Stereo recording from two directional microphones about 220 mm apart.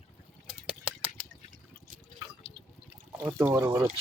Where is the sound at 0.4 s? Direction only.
5° right (ahead or behind).